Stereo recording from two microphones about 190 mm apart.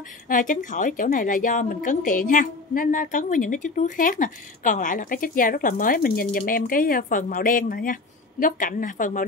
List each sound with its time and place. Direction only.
0.3 s a woman's voice: 45° left (ahead or behind)